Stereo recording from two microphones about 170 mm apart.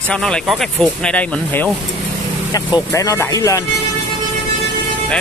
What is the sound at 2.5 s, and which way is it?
Speech, 20° left (ahead or behind).